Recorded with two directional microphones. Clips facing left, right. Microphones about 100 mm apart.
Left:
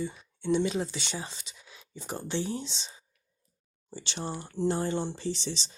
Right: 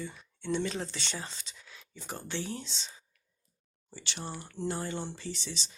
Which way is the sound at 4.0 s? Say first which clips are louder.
Left 5 dB; 25° left (ahead or behind).